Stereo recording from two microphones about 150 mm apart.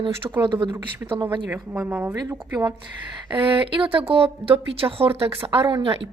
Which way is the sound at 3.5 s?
35° right (ahead or behind).